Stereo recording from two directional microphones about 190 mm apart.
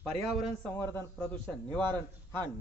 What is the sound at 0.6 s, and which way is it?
A man's voice, 10° left (ahead or behind).